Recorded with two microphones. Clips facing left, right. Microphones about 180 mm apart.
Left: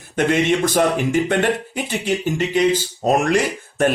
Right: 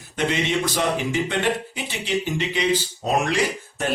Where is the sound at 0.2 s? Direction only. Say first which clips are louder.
Left 6 dB; 50° left (ahead or behind).